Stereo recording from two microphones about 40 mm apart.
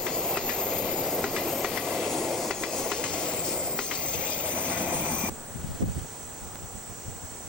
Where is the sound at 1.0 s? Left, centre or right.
Centre.